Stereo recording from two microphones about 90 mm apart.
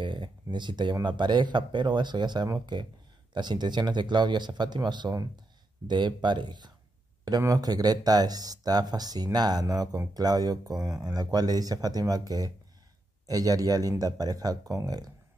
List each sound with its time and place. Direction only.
0.0 s a sound: 60° right (ahead or behind)
1.0 s speech: 60° right (ahead or behind)
5.1 s speech: 40° right (ahead or behind)
5.9 s speech: 55° right (ahead or behind)
7.2 s speech: 45° right (ahead or behind)